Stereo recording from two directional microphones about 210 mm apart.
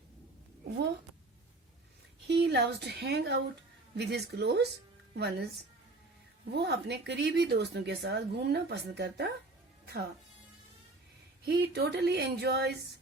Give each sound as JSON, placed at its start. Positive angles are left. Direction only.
{"t": 2.2, "sound": "a woman's voice", "side_deg": -55}
{"t": 6.5, "sound": "speech", "side_deg": -50}
{"t": 11.4, "sound": "speech", "side_deg": -50}